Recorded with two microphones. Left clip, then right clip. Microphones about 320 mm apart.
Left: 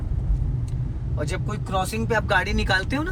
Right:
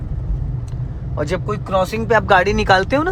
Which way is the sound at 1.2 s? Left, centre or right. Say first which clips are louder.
Right 9 dB; right.